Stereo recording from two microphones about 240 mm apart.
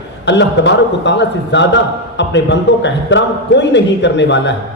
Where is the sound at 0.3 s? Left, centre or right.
Left.